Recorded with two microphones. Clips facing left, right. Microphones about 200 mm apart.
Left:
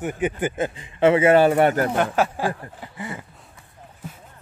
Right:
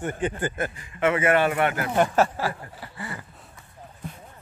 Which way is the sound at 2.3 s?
15° left (ahead or behind).